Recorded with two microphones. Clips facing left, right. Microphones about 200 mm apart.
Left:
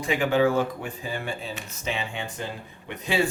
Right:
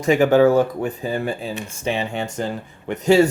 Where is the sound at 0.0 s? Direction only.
45° right (ahead or behind).